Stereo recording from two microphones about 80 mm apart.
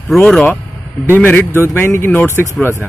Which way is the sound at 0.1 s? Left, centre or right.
Centre.